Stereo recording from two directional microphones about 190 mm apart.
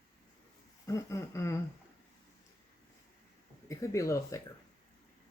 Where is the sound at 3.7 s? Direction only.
15° left (ahead or behind).